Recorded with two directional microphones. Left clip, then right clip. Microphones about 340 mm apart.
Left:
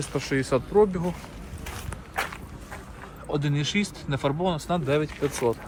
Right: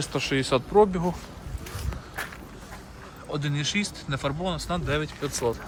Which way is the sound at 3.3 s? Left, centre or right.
Centre.